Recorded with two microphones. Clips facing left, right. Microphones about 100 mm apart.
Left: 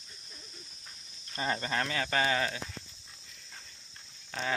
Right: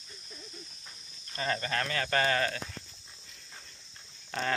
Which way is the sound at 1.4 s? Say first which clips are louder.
Even; 20° left (ahead or behind).